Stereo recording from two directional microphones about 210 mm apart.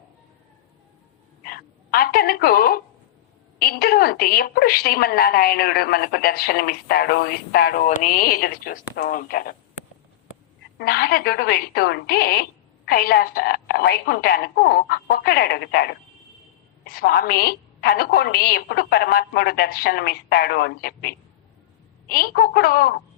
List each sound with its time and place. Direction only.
1.5 s a sound: 45° left (ahead or behind)
3.6 s a woman's voice: 45° left (ahead or behind)
10.8 s a woman's voice: 50° left (ahead or behind)